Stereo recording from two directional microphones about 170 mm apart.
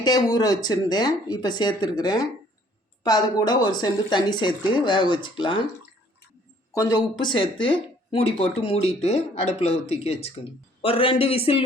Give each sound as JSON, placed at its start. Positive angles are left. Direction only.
{"t": 0.0, "sound": "speech", "side_deg": 25}
{"t": 6.7, "sound": "speech", "side_deg": 20}